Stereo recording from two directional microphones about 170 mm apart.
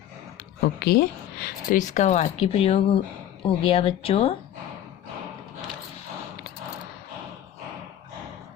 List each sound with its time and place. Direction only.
0.6 s speech: 65° left (ahead or behind)
1.8 s speech: 45° left (ahead or behind)